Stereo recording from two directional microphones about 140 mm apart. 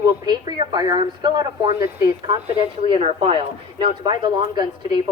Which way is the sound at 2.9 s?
40° right (ahead or behind).